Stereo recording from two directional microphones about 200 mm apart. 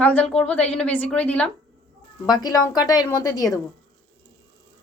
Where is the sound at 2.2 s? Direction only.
20° left (ahead or behind).